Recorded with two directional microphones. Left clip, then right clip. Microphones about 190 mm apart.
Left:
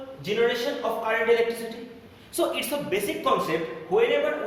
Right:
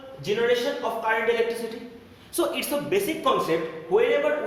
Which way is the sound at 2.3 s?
35° right (ahead or behind).